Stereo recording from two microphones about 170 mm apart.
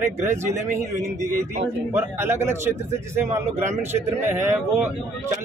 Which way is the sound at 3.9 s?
15° right (ahead or behind).